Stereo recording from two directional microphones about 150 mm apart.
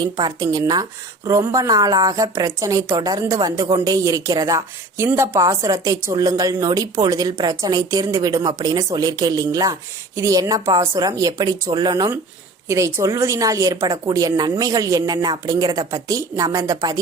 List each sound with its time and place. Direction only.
0.0 s a woman's voice: 30° right (ahead or behind)